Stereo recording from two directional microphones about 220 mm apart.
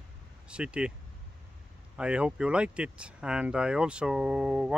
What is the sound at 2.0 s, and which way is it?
Speech, 5° right (ahead or behind).